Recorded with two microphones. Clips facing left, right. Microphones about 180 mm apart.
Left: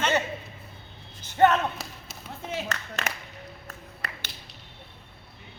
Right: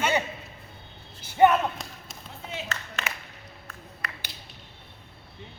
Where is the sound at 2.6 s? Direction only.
40° left (ahead or behind).